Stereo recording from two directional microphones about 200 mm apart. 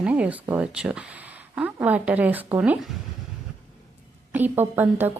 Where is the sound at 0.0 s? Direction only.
10° right (ahead or behind).